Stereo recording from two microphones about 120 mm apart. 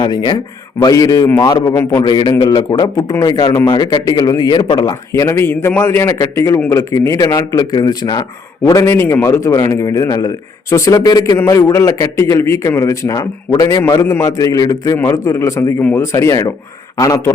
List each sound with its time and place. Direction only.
0.0 s a man's voice: 35° left (ahead or behind)
2.0 s a man's voice: 40° left (ahead or behind)
14.0 s speech: 20° left (ahead or behind)
15.8 s speech: 15° left (ahead or behind)
16.1 s speech: 30° left (ahead or behind)